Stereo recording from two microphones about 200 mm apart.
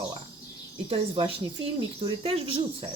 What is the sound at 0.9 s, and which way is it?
Speech, 25° right (ahead or behind).